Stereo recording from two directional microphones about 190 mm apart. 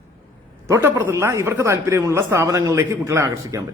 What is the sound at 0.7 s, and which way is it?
A man's voice, 15° right (ahead or behind).